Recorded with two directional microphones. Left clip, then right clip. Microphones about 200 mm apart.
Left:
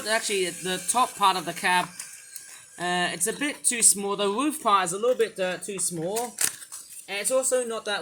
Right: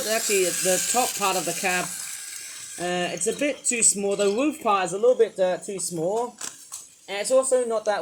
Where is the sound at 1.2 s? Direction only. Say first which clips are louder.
Left 2 dB; 25° left (ahead or behind).